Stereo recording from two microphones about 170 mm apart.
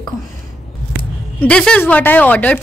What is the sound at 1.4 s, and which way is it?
A woman's voice, 5° left (ahead or behind).